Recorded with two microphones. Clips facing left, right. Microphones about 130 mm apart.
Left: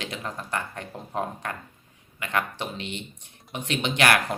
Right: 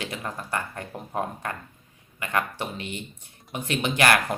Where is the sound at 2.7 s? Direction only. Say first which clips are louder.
Even; 50° right (ahead or behind).